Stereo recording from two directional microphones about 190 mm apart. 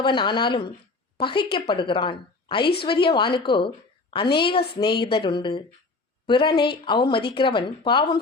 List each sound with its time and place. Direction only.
0.0 s a woman's voice: 25° left (ahead or behind)